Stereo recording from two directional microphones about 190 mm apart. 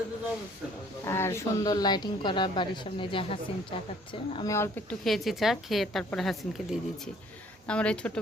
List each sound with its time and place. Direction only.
1.0 s a woman's voice: 15° left (ahead or behind)
4.5 s speech: 10° left (ahead or behind)